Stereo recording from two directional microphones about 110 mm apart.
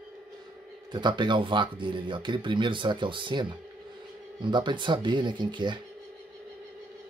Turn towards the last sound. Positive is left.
turn(degrees=-45)  # may be behind; listen again after turning